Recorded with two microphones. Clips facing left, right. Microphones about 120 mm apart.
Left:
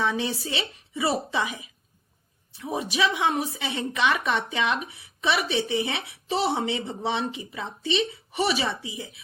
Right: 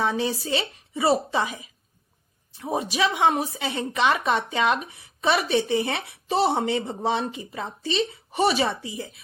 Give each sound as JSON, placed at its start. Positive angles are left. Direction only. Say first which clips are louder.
{"t": 0.0, "sound": "a woman's voice", "louder": "right 2 dB", "side_deg": -40}